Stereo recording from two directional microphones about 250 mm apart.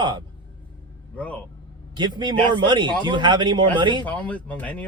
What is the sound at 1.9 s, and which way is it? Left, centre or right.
Speech, centre.